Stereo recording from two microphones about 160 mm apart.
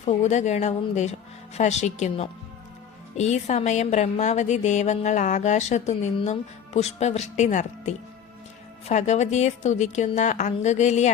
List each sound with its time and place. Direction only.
0.0 s a woman's voice: 45° left (ahead or behind)